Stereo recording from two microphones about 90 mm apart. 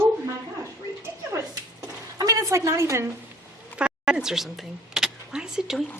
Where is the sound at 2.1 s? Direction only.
40° right (ahead or behind).